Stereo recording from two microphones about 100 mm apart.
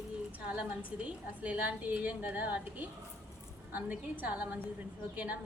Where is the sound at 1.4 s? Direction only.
15° right (ahead or behind).